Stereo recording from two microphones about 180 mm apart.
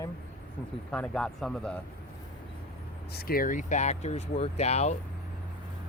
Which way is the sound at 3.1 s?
60° left (ahead or behind).